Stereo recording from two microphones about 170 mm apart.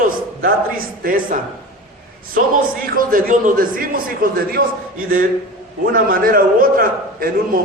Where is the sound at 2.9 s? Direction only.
50° right (ahead or behind).